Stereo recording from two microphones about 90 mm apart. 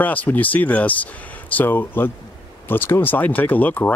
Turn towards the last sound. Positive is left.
turn(degrees=20)  # may be behind; listen again after turning